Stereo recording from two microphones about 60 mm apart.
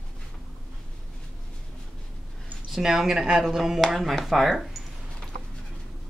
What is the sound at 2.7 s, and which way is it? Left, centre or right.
Speech, centre.